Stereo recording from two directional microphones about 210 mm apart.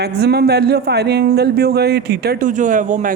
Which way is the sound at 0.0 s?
50° right (ahead or behind).